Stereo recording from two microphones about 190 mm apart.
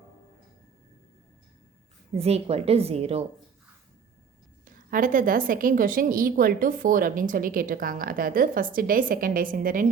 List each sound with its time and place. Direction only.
2.1 s a woman's voice: 35° right (ahead or behind)
4.6 s a woman's voice: 45° right (ahead or behind)